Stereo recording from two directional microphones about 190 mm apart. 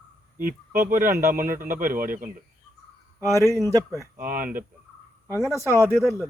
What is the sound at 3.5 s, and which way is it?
Speech, 15° right (ahead or behind).